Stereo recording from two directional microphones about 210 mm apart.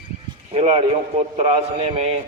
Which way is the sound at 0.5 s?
30° right (ahead or behind).